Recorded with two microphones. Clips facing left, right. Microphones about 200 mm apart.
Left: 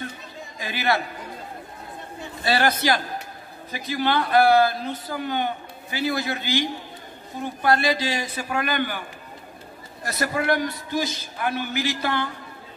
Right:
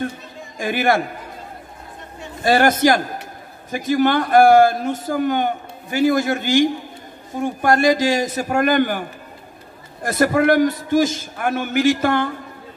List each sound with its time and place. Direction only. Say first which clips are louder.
0.6 s a man's voice: right 7 dB; 50° right (ahead or behind)
2.4 s a man's voice: right 7 dB; 45° right (ahead or behind)